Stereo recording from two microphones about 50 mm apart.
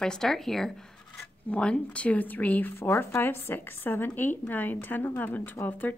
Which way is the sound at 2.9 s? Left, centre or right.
Left.